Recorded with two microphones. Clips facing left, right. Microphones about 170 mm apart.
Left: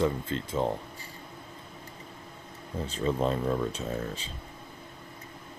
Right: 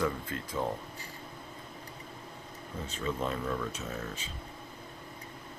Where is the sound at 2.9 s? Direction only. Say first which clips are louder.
Left 6 dB; 35° left (ahead or behind).